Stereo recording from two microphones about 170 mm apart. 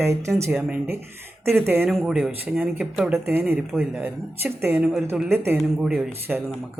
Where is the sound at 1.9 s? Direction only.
Centre (ahead or behind).